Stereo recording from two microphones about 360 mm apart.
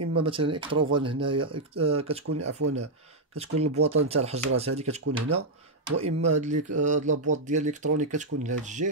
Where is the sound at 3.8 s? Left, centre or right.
Centre.